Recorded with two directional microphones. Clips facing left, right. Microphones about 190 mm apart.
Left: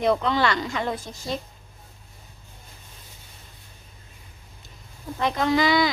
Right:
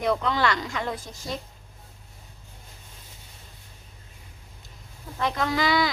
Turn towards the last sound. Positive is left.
turn(degrees=20)  # may be behind; listen again after turning